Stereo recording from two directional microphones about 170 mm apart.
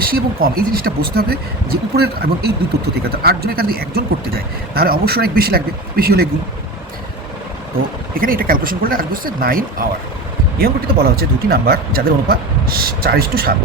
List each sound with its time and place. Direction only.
0.0 s speech: 60° right (ahead or behind)
8.1 s speech: 60° right (ahead or behind)